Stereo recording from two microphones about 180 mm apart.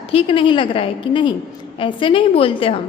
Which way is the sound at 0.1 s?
30° left (ahead or behind).